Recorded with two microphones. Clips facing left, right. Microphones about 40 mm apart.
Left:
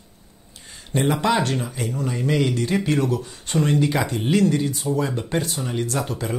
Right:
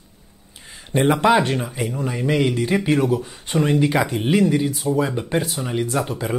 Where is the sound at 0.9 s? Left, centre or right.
Right.